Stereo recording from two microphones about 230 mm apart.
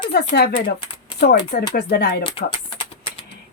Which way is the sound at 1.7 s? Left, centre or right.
Left.